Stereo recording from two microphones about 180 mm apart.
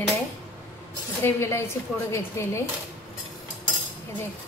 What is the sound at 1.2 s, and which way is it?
A woman's voice, 15° left (ahead or behind).